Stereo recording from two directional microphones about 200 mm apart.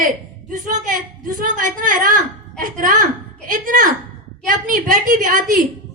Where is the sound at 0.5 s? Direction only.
40° right (ahead or behind).